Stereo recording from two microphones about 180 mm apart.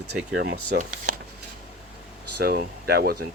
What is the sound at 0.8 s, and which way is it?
Speech, 45° right (ahead or behind).